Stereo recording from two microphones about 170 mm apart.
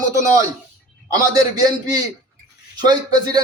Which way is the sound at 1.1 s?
20° right (ahead or behind).